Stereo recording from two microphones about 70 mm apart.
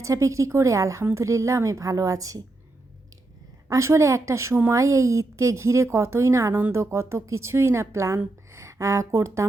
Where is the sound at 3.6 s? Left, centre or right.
Right.